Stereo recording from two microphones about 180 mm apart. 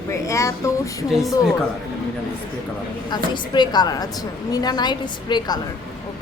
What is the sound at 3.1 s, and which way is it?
A woman's voice, 25° left (ahead or behind).